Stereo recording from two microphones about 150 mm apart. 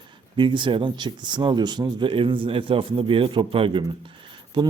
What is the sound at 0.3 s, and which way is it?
Speech, 30° right (ahead or behind).